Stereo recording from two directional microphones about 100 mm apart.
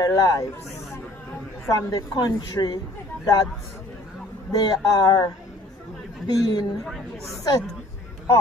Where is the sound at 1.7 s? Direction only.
35° left (ahead or behind).